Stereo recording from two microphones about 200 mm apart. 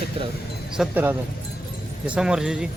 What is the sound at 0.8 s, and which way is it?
Speech, 10° right (ahead or behind).